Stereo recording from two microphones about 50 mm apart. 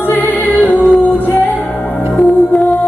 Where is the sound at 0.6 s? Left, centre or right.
Left.